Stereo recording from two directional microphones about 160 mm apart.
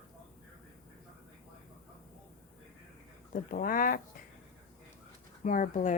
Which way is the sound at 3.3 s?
60° left (ahead or behind).